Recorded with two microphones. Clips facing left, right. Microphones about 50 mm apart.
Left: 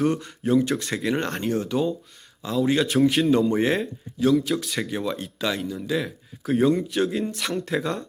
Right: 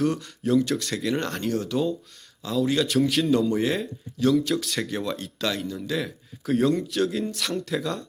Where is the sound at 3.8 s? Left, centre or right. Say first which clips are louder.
Left 1 dB; centre.